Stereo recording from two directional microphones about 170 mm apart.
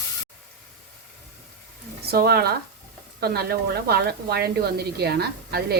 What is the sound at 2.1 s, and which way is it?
A woman's voice, 65° right (ahead or behind).